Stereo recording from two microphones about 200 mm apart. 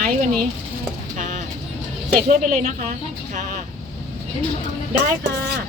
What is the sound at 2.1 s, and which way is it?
Speech, 40° right (ahead or behind).